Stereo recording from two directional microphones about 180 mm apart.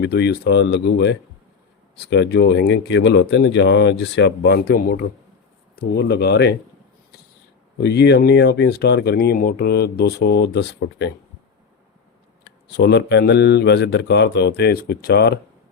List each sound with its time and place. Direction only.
0.0 s speech: 65° left (ahead or behind)
7.8 s speech: 65° left (ahead or behind)
12.6 s speech: 70° left (ahead or behind)